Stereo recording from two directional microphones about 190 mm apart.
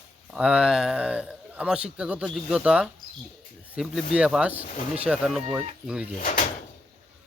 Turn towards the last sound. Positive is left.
turn(degrees=45)  # may be behind; listen again after turning